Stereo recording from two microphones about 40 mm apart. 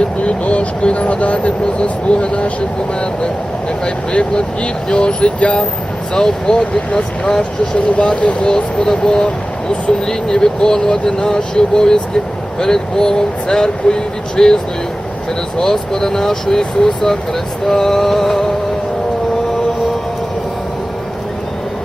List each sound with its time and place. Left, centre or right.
0.3 s speech: left
3.8 s speech: left